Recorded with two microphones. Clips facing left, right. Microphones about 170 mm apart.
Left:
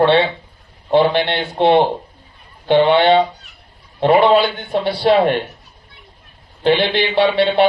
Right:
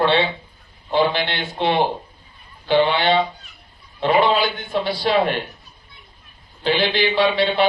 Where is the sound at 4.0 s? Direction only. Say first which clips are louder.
Left 5 dB; 60° left (ahead or behind).